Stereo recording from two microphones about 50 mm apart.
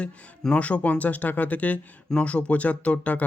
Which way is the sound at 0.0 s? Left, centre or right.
Left.